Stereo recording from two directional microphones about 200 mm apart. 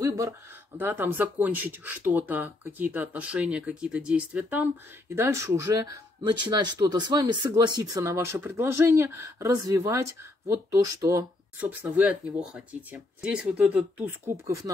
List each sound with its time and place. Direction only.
0.0 s speech: 15° right (ahead or behind)